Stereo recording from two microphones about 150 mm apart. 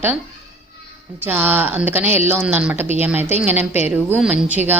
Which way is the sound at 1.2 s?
15° right (ahead or behind).